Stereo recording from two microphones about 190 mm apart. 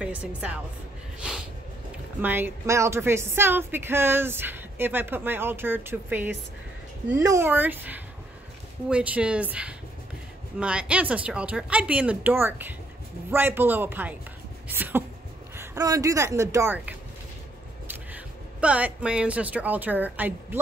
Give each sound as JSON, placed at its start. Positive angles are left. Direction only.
{"t": 0.0, "sound": "a woman's voice", "side_deg": -5}
{"t": 2.2, "sound": "a woman's voice", "side_deg": -10}
{"t": 14.7, "sound": "a sound", "side_deg": -10}
{"t": 15.5, "sound": "speech", "side_deg": -15}